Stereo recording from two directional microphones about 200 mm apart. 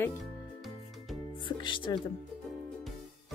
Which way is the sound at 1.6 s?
25° left (ahead or behind).